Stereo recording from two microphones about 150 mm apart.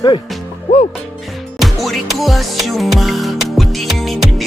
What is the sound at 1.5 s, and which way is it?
Music, centre (ahead or behind).